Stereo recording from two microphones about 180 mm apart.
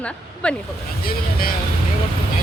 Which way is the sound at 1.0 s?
55° left (ahead or behind).